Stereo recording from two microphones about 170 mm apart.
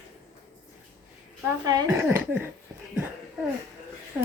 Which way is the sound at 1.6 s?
20° right (ahead or behind).